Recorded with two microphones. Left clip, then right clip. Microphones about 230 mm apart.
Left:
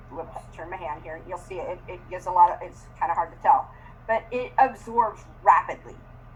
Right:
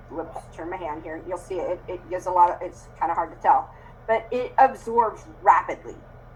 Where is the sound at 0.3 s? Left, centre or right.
Right.